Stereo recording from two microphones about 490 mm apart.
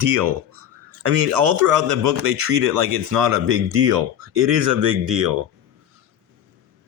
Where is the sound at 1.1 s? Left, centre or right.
Right.